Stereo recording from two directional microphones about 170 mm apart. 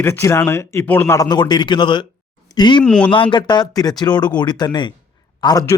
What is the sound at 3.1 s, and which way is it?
A man's voice, 30° left (ahead or behind).